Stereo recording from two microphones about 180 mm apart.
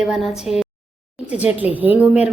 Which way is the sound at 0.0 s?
Centre (ahead or behind).